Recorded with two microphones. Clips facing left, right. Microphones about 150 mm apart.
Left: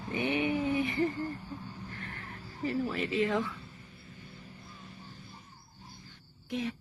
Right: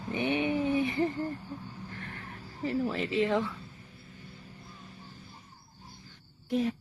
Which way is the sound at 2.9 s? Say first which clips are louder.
Right 2 dB; 25° right (ahead or behind).